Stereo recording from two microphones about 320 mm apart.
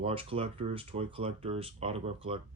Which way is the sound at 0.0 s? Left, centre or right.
Centre.